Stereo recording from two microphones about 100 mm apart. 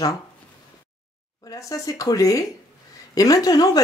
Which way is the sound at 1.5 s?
35° left (ahead or behind).